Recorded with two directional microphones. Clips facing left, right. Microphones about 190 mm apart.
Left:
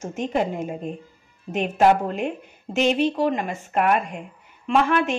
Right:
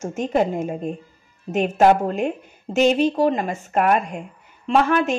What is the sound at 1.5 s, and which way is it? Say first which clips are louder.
Speech: right 2 dB; 45° right (ahead or behind).